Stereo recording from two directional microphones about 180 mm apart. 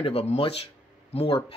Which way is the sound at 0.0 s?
30° left (ahead or behind).